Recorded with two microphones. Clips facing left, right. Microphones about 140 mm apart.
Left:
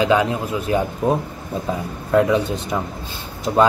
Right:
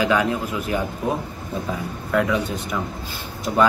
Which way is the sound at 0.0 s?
25° left (ahead or behind).